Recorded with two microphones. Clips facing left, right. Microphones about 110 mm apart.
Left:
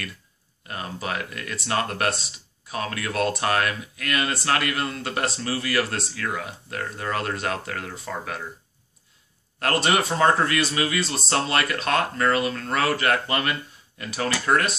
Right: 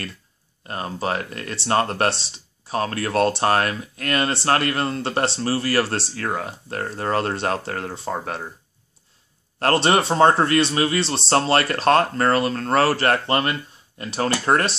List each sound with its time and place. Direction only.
0.7 s speech: 35° right (ahead or behind)
9.6 s speech: 35° right (ahead or behind)